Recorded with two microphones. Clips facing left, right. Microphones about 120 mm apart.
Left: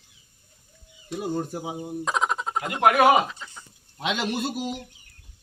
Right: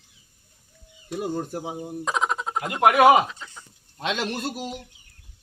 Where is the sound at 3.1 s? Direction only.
Centre (ahead or behind).